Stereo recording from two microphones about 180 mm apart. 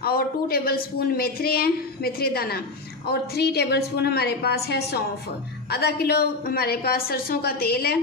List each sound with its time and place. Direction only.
0.0 s a woman's voice: 60° left (ahead or behind)